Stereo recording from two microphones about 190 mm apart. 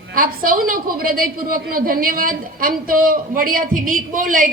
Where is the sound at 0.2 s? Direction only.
50° right (ahead or behind).